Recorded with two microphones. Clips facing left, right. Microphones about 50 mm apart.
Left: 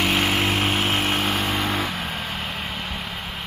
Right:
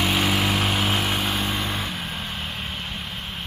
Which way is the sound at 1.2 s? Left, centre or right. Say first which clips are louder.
Left 2 dB; left.